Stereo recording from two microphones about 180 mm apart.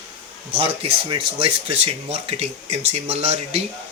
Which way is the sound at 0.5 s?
30° right (ahead or behind).